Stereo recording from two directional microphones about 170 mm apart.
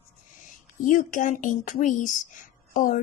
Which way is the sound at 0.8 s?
50° left (ahead or behind).